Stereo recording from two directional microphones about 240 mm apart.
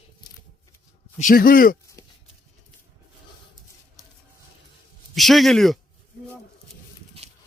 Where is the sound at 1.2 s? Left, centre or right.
Left.